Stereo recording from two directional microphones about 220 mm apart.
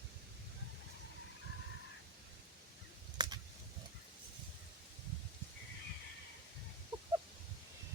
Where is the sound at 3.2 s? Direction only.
20° right (ahead or behind).